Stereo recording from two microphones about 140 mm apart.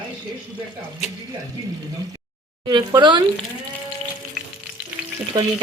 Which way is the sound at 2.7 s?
30° right (ahead or behind).